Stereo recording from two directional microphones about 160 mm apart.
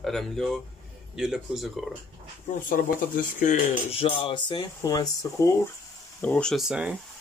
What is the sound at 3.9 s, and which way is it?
Music, 35° left (ahead or behind).